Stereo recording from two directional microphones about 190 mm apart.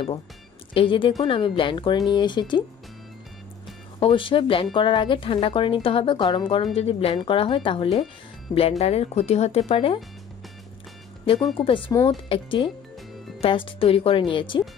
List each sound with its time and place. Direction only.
0.7 s a woman's voice: 25° left (ahead or behind)
4.0 s a woman's voice: 25° left (ahead or behind)
11.5 s a woman's voice: 25° left (ahead or behind)